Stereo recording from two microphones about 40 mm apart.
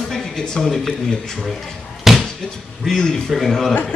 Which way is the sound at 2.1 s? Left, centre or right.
Centre.